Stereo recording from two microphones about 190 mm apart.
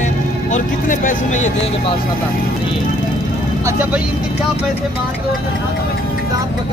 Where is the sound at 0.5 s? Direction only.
40° left (ahead or behind).